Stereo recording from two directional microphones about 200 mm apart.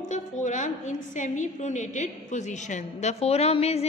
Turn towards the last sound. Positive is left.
turn(degrees=30)  # may be behind; listen again after turning